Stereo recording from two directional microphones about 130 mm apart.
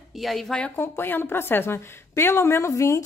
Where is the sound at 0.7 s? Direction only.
15° left (ahead or behind).